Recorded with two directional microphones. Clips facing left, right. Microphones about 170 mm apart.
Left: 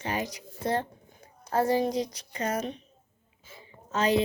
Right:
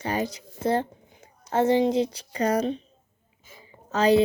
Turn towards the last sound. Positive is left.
turn(degrees=-30)  # may be behind; listen again after turning